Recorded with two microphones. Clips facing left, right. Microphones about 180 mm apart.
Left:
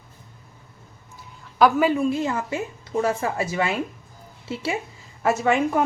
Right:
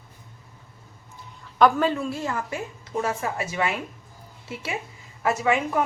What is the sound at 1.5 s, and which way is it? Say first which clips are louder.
A woman's voice: left 2 dB; 5° left (ahead or behind).